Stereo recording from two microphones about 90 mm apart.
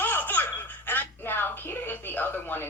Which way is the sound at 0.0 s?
20° left (ahead or behind).